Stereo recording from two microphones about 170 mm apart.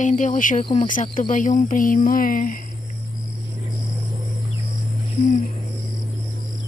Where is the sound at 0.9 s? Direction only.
50° left (ahead or behind).